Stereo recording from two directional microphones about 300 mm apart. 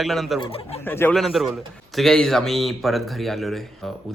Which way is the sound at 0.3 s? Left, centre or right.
Centre.